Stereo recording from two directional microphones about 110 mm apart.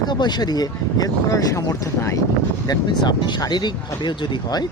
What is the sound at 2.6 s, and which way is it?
Speech, 40° left (ahead or behind).